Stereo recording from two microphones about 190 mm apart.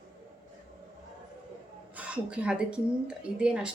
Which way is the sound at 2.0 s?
5° right (ahead or behind).